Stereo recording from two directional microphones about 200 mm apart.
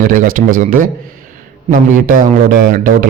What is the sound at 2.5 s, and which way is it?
Speech, 40° right (ahead or behind).